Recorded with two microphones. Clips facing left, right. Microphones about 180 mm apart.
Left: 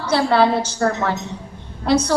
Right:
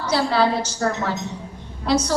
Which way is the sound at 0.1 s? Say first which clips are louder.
Left 3 dB; 60° left (ahead or behind).